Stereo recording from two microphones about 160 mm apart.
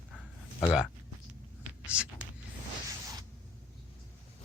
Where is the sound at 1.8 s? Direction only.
5° right (ahead or behind).